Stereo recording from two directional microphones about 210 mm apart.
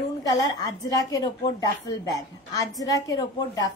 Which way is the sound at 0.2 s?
20° left (ahead or behind).